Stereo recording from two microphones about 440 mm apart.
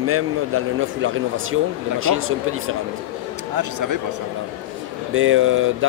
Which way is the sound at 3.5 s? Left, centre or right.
Right.